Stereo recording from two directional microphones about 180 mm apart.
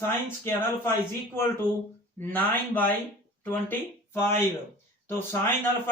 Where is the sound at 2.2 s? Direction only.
10° left (ahead or behind).